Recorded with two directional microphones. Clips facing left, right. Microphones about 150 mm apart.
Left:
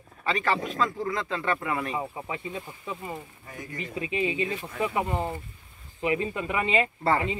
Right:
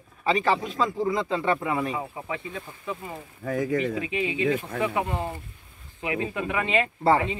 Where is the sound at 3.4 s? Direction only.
90° right.